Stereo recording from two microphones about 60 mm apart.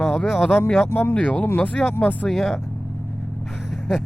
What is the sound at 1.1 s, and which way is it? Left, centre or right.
Speech, left.